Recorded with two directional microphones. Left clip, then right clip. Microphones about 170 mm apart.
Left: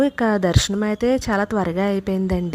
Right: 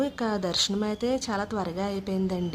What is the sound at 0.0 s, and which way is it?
A woman's voice, 35° left (ahead or behind).